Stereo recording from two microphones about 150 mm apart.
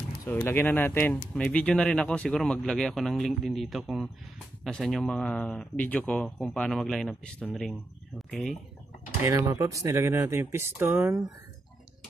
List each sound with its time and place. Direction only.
0.3 s speech: 15° left (ahead or behind)
9.2 s speech: 20° right (ahead or behind)